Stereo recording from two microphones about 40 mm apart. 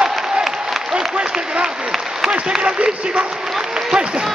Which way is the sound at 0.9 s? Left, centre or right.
Centre.